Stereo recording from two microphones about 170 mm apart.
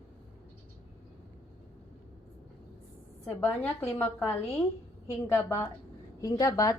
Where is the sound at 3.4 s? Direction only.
10° left (ahead or behind).